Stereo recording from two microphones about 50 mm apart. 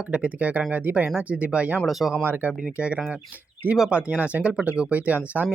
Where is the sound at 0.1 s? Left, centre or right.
Right.